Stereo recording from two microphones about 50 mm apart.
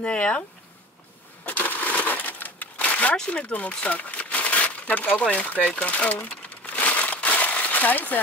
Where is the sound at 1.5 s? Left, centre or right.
Left.